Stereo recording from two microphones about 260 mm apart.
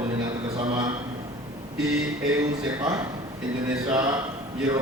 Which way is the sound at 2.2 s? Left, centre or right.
Centre.